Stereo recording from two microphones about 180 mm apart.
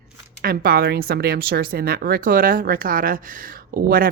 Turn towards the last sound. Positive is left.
turn(degrees=-50)  # may be behind; listen again after turning